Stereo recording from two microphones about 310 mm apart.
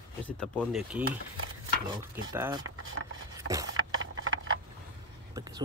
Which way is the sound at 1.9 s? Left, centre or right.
Centre.